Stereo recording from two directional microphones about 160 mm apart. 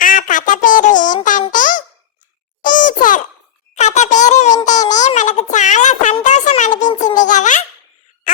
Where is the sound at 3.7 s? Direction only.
45° left (ahead or behind).